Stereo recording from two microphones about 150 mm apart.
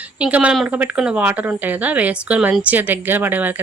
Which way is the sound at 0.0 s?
10° right (ahead or behind).